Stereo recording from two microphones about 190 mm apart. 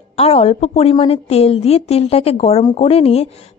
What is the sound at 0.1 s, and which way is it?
A woman's voice, 35° left (ahead or behind).